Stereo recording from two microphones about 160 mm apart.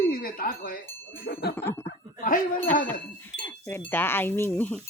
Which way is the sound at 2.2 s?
60° left (ahead or behind).